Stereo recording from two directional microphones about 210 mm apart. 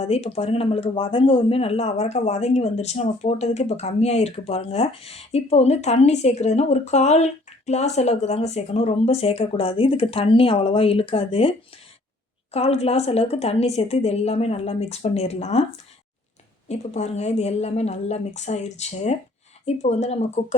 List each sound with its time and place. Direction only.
0.0 s speech: 30° left (ahead or behind)
12.5 s speech: 30° left (ahead or behind)
16.6 s speech: 30° left (ahead or behind)